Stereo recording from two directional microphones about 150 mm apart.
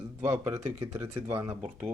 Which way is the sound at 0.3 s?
15° right (ahead or behind).